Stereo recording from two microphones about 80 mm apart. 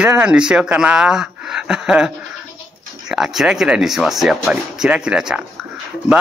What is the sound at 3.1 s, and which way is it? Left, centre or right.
Speech, centre.